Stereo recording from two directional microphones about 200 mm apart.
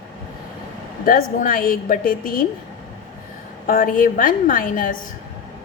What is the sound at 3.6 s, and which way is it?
A woman's voice, 45° left (ahead or behind).